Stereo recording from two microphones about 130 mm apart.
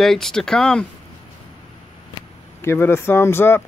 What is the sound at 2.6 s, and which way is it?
Speech, 20° left (ahead or behind).